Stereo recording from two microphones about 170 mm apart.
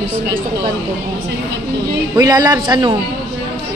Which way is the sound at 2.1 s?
20° right (ahead or behind).